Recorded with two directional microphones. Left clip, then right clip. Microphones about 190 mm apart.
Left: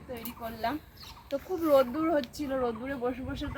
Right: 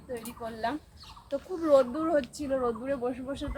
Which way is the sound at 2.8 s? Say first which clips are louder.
Right 2 dB; 10° right (ahead or behind).